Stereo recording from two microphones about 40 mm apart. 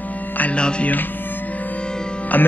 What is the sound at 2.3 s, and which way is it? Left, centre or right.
Speech, left.